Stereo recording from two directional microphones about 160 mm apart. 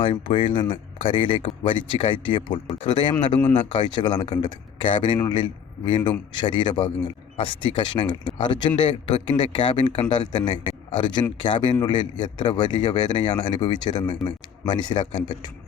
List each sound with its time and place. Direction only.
0.0 s a man's voice: 35° left (ahead or behind)
3.4 s speech: 10° left (ahead or behind)
3.7 s a man's voice: 25° left (ahead or behind)